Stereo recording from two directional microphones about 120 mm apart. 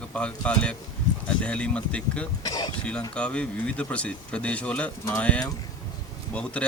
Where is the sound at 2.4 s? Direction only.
35° left (ahead or behind).